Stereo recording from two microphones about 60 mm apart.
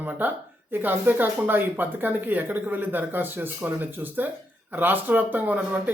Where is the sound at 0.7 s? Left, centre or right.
Right.